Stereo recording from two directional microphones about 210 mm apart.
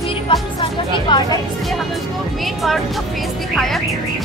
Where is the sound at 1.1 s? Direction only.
20° left (ahead or behind).